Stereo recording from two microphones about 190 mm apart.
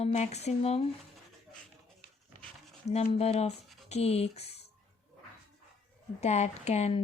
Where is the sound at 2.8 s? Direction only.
35° left (ahead or behind).